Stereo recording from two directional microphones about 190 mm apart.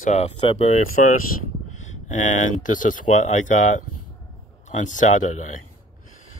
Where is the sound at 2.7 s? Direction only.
45° left (ahead or behind).